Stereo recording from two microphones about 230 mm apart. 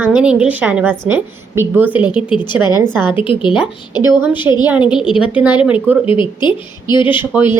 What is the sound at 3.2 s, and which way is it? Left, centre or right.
Speech, left.